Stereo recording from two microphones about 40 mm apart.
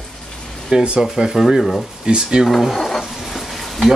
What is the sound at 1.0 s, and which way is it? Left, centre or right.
Speech, centre.